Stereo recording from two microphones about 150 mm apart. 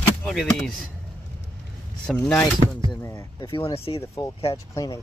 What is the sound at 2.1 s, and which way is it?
Speech, 5° left (ahead or behind).